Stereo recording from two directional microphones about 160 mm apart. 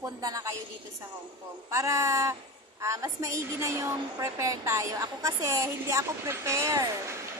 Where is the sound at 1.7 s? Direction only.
20° right (ahead or behind).